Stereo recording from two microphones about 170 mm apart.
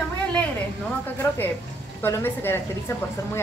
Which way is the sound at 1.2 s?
15° left (ahead or behind).